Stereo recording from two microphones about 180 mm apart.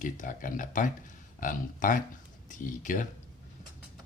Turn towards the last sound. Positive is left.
turn(degrees=45)  # may be behind; listen again after turning